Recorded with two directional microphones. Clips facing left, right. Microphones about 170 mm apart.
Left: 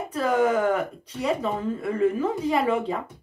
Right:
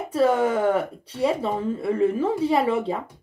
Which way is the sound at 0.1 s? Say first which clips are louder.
Right 2 dB; 30° right (ahead or behind).